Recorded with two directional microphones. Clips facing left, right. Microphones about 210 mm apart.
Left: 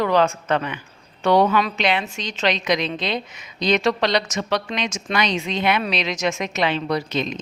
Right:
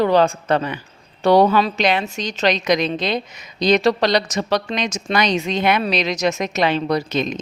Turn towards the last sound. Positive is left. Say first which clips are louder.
# right 3 dB
turn(degrees=-45)  # may be behind; listen again after turning